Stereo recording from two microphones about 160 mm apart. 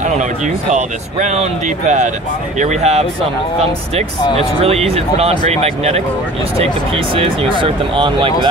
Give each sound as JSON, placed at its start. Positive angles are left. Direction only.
{"t": 0.0, "sound": "speech", "side_deg": -50}
{"t": 4.4, "sound": "speech", "side_deg": -40}
{"t": 7.2, "sound": "speech", "side_deg": -35}